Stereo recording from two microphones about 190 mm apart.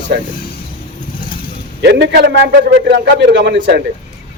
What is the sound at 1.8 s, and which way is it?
A man's voice, 60° right (ahead or behind).